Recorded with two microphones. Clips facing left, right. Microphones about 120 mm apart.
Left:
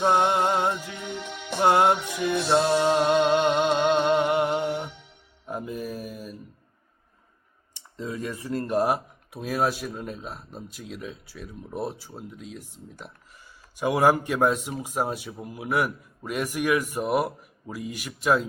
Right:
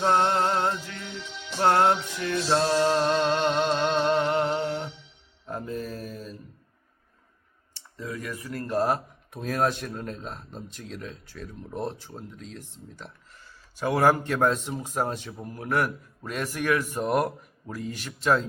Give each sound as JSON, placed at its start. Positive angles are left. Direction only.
{"t": 0.0, "sound": "music", "side_deg": 15}
{"t": 1.0, "sound": "music", "side_deg": 55}
{"t": 1.6, "sound": "speech", "side_deg": 10}
{"t": 2.5, "sound": "music", "side_deg": 15}
{"t": 5.5, "sound": "mantra", "side_deg": 10}
{"t": 7.7, "sound": "speech", "side_deg": 20}